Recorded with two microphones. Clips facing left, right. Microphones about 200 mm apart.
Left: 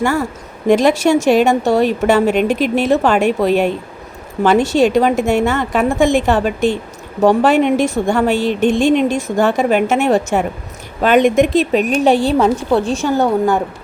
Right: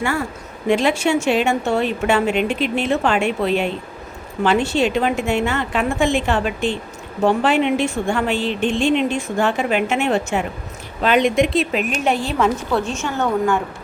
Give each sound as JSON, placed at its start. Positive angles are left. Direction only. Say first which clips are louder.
{"t": 0.0, "sound": "a woman's voice", "louder": "left 5 dB", "side_deg": 40}